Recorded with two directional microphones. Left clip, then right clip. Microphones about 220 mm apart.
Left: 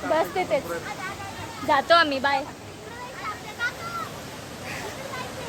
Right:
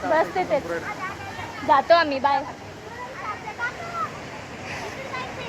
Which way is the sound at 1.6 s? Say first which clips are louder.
Right 2 dB; 5° left (ahead or behind).